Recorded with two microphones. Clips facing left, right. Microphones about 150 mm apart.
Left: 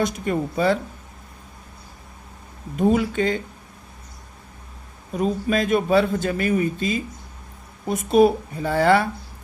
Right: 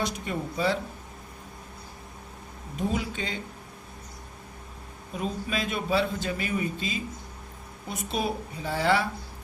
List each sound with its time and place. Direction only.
0.0 s speech: 50° left (ahead or behind)
2.7 s speech: 55° left (ahead or behind)
5.1 s speech: 45° left (ahead or behind)